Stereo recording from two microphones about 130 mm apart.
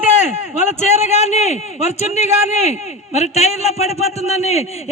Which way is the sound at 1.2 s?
60° left (ahead or behind).